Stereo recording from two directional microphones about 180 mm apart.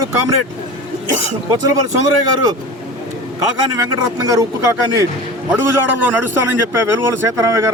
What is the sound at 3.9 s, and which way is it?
Speech, 20° right (ahead or behind).